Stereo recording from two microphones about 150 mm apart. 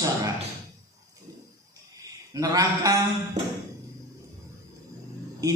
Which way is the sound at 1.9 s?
25° right (ahead or behind).